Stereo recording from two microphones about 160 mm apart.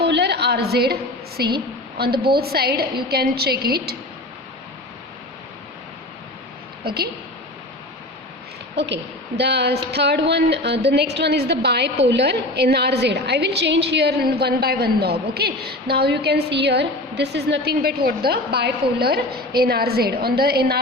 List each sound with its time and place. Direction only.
0.0 s a sound: 90° right
1.4 s a woman's voice: 80° right
6.8 s a woman's voice: 75° right (ahead or behind)
9.4 s a woman's voice: 90° right